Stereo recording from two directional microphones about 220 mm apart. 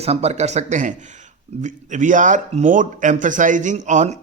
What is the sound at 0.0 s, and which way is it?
A man's voice, 30° right (ahead or behind).